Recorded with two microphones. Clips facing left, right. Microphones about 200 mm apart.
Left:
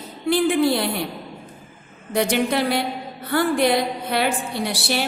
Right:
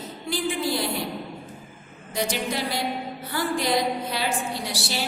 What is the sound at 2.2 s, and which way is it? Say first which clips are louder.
A woman's voice: left 7 dB; 60° left (ahead or behind).